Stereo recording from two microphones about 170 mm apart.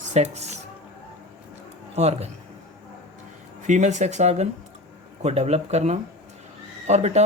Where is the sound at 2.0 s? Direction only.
40° right (ahead or behind).